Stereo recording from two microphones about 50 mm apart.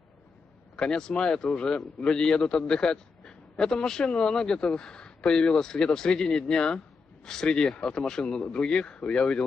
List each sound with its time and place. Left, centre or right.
0.7 s speech: centre